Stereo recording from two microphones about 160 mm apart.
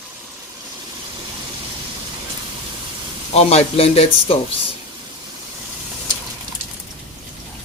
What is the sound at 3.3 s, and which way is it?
Speech, 40° left (ahead or behind).